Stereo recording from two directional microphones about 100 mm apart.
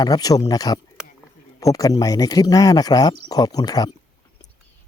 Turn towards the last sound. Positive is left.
turn(degrees=40)  # may be behind; listen again after turning